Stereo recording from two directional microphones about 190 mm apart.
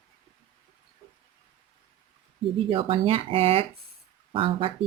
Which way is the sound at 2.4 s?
30° right (ahead or behind).